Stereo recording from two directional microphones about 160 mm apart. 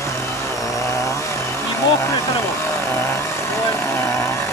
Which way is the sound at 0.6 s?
20° left (ahead or behind).